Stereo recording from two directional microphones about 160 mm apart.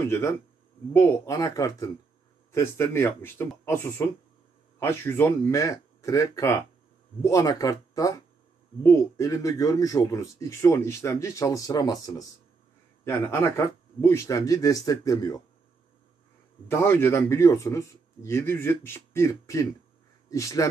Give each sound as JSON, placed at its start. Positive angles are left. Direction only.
{"t": 0.0, "sound": "a man's voice", "side_deg": 15}
{"t": 16.6, "sound": "a man's voice", "side_deg": 15}